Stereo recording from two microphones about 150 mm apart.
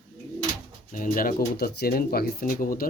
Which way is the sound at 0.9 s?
60° left (ahead or behind).